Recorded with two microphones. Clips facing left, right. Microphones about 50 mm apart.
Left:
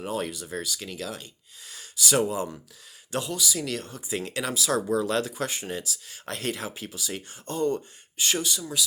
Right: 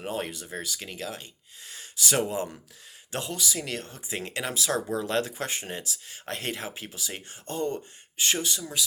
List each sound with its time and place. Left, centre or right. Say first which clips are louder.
0.0 s speech: left 2 dB; right